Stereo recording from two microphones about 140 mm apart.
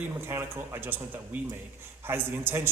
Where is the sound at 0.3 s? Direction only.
20° right (ahead or behind).